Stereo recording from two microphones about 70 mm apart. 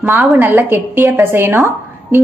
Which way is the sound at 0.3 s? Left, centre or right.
Right.